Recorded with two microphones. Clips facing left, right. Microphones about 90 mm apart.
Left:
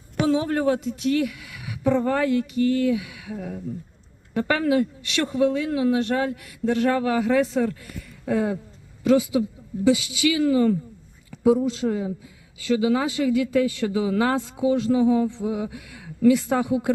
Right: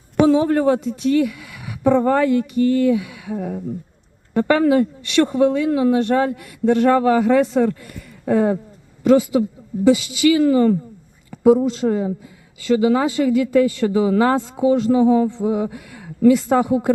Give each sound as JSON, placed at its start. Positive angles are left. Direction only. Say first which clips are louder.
{"t": 0.3, "sound": "speech", "louder": "right 6 dB", "side_deg": -35}
{"t": 0.9, "sound": "speech", "louder": "right 5 dB", "side_deg": -50}
{"t": 3.3, "sound": "speech", "louder": "right 6 dB", "side_deg": -35}
{"t": 7.8, "sound": "speech", "louder": "right 2 dB", "side_deg": -45}